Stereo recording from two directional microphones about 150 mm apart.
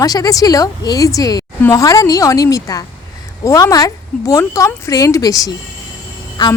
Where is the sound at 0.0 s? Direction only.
25° left (ahead or behind).